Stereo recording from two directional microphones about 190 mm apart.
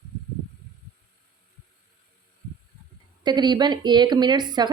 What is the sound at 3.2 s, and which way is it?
A woman's voice, 20° right (ahead or behind).